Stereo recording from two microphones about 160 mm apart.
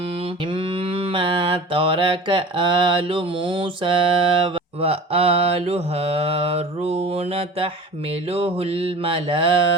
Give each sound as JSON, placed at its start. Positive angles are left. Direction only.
{"t": 0.5, "sound": "mantra", "side_deg": -35}